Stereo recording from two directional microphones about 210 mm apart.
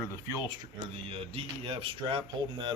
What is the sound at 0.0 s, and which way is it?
Speech, 15° left (ahead or behind).